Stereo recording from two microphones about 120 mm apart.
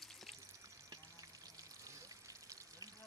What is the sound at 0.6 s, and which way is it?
Pour, 30° right (ahead or behind).